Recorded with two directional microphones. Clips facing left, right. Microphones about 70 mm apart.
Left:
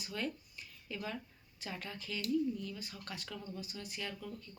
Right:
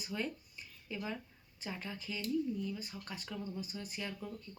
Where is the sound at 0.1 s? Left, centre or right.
Centre.